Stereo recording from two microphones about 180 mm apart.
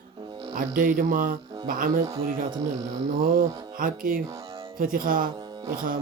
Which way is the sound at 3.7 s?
50° right (ahead or behind).